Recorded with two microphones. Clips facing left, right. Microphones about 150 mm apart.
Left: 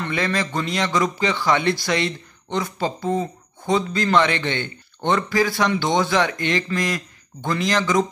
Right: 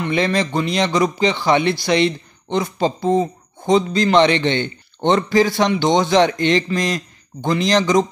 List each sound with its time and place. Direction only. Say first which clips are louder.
0.0 s a man's voice: right 5 dB; 20° right (ahead or behind)